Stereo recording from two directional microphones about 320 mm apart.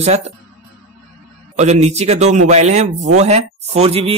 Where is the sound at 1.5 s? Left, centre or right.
Right.